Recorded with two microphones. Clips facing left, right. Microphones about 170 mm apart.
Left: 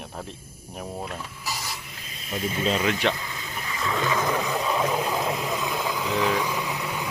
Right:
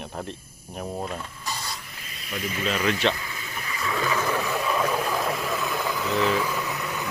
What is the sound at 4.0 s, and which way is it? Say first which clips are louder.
Vehicle: left 1 dB; 20° left (ahead or behind).